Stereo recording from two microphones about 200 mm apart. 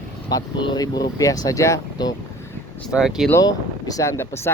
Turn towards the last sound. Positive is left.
turn(degrees=15)  # may be behind; listen again after turning